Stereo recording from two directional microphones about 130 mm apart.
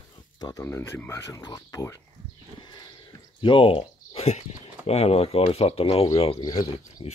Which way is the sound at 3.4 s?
45° left (ahead or behind).